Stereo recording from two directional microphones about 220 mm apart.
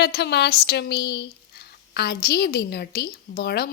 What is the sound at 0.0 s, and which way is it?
Speech, 50° left (ahead or behind).